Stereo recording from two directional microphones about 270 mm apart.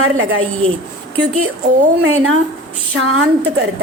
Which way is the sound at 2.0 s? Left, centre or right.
Right.